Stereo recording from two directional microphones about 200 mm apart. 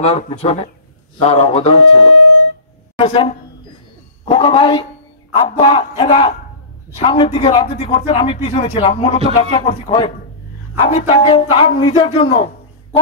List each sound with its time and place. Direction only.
0.0 s a man's voice: 30° left (ahead or behind)